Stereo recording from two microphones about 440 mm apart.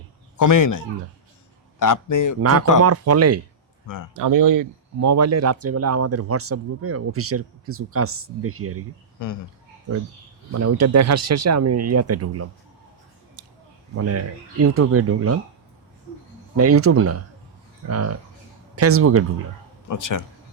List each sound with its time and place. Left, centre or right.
0.3 s a man's voice: left
2.4 s speech: right
3.8 s a man's voice: left
4.1 s speech: right
9.2 s speech: left
10.5 s speech: right
13.4 s a sound: right
13.9 s speech: right
16.6 s speech: right
19.9 s a man's voice: left